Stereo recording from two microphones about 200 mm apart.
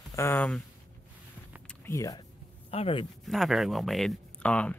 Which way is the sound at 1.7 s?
15° left (ahead or behind).